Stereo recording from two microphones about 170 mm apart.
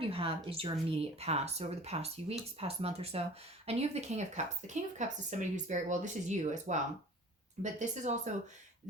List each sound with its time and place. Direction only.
0.0 s a woman's voice: 35° right (ahead or behind)